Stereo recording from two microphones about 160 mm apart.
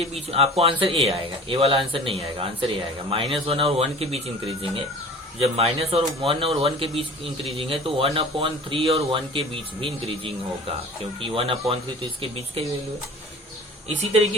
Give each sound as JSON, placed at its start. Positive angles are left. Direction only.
{"t": 0.0, "sound": "speech", "side_deg": -35}
{"t": 13.8, "sound": "speech", "side_deg": -40}